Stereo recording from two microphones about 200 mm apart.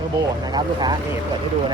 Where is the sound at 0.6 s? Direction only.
20° right (ahead or behind).